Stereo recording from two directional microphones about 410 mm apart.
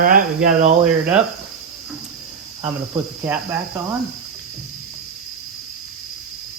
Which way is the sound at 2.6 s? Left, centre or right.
Centre.